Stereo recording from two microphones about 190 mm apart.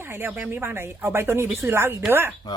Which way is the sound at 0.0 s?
10° right (ahead or behind).